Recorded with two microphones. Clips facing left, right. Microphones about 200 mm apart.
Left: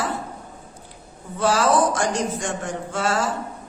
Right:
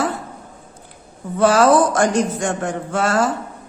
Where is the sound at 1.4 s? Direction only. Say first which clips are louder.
Right 6 dB; 55° right (ahead or behind).